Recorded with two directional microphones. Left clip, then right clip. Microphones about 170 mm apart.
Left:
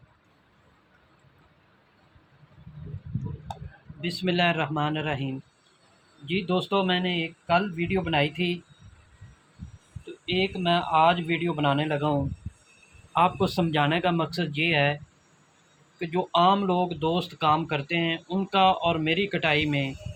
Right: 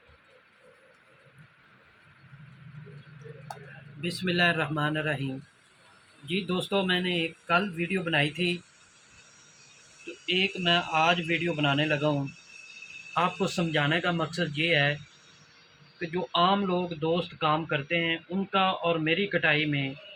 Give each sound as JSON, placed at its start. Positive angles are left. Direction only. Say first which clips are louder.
{"t": 4.1, "sound": "speech", "louder": "left 1 dB", "side_deg": 45}
{"t": 6.3, "sound": "speech", "louder": "left 3 dB", "side_deg": 45}
{"t": 10.3, "sound": "speech", "louder": "left 1 dB", "side_deg": 55}
{"t": 13.1, "sound": "speech", "louder": "left 4 dB", "side_deg": 50}
{"t": 16.0, "sound": "speech", "louder": "left 3 dB", "side_deg": 55}